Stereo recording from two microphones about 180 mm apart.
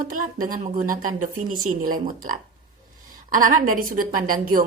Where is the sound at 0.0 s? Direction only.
50° right (ahead or behind).